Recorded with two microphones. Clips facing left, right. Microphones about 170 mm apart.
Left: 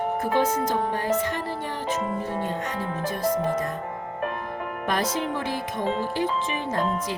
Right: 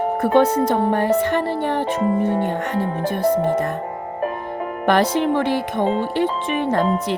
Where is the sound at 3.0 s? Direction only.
65° right (ahead or behind).